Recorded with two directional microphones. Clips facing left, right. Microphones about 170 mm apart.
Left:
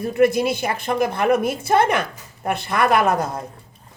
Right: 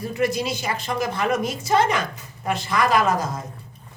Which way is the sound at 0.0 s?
55° left (ahead or behind).